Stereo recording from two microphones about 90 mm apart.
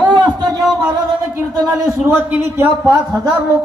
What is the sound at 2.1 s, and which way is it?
Speech, 20° right (ahead or behind).